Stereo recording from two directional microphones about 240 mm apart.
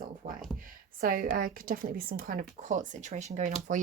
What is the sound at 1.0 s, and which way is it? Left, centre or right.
Speech, right.